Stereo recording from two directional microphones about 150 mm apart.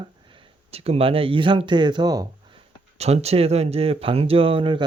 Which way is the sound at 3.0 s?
45° right (ahead or behind).